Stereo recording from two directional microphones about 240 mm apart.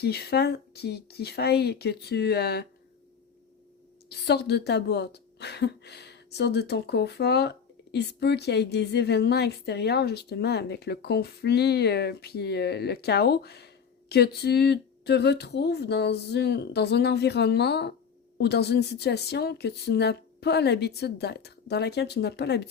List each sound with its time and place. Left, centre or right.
0.0 s speech: left
4.1 s speech: left